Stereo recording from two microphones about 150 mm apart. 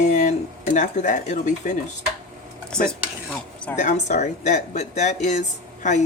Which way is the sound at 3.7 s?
50° left (ahead or behind).